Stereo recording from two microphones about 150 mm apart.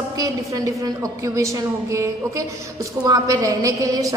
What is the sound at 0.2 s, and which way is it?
A woman's voice, 20° right (ahead or behind).